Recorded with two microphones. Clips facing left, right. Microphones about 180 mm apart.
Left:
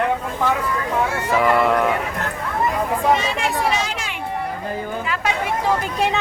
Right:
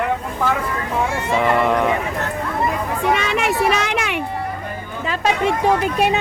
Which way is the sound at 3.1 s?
70° right (ahead or behind).